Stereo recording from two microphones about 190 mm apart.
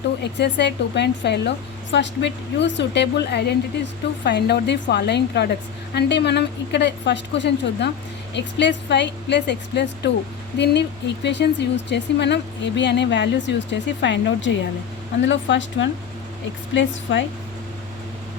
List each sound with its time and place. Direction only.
0.2 s speech: 65° left (ahead or behind)